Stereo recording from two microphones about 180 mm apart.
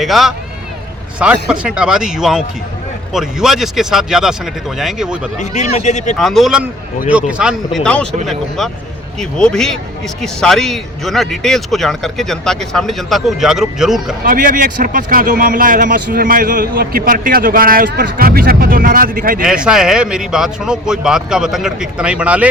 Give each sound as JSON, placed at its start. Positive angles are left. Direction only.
{"t": 0.0, "sound": "speech", "side_deg": 0}
{"t": 5.4, "sound": "speech", "side_deg": 40}
{"t": 6.1, "sound": "speech", "side_deg": 0}
{"t": 14.3, "sound": "speech", "side_deg": -50}
{"t": 19.6, "sound": "speech", "side_deg": -5}